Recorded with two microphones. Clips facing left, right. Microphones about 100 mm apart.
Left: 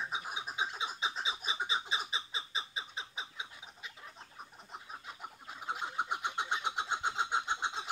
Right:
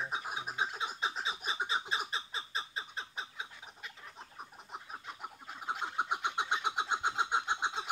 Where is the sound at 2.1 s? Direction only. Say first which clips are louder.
Right 1 dB; centre (ahead or behind).